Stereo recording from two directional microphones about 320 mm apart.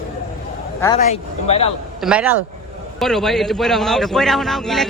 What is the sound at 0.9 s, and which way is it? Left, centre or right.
Speech, left.